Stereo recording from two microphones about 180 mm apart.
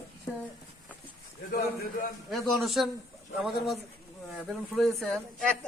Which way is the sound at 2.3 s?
Centre (ahead or behind).